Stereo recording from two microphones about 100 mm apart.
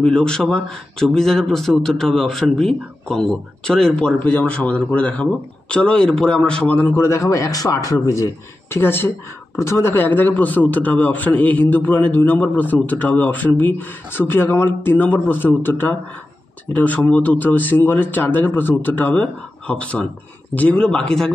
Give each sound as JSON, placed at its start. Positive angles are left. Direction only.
{"t": 0.0, "sound": "speech", "side_deg": 10}
{"t": 7.0, "sound": "a man's voice", "side_deg": 30}